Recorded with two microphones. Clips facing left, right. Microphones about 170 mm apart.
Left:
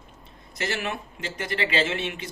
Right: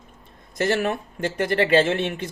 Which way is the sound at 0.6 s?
45° right (ahead or behind).